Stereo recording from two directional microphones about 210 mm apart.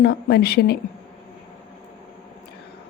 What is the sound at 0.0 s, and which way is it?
Speech, 50° left (ahead or behind).